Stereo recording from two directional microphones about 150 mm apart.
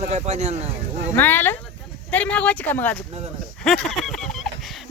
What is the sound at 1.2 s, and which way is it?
Speech, 15° left (ahead or behind).